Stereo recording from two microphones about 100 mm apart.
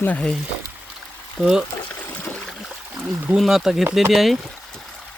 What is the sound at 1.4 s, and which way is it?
Speech, 5° right (ahead or behind).